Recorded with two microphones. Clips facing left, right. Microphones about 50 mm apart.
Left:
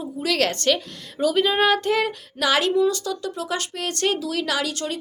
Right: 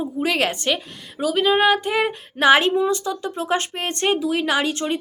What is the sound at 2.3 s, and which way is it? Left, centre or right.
A woman's voice, right.